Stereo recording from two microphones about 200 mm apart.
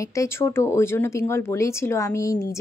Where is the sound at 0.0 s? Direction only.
15° left (ahead or behind).